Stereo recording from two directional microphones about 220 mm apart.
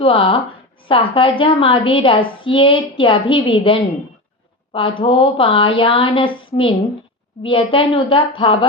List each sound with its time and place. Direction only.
0.0 s speech: 25° left (ahead or behind)